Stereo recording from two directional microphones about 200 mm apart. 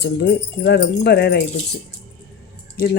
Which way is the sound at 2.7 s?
50° left (ahead or behind).